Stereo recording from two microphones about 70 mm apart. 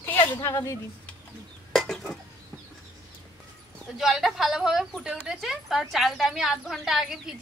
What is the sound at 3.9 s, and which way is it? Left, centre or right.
Speech, centre.